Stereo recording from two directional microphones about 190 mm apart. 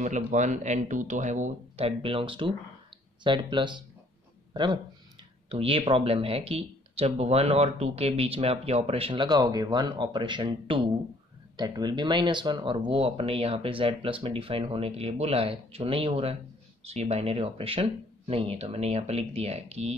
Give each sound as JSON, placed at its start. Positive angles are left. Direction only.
{"t": 0.0, "sound": "speech", "side_deg": -40}
{"t": 5.5, "sound": "speech", "side_deg": -30}